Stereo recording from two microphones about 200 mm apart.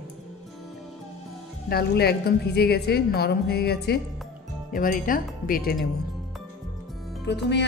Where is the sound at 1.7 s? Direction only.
50° left (ahead or behind).